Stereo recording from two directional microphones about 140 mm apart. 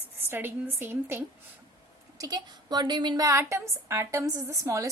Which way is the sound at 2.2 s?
30° right (ahead or behind).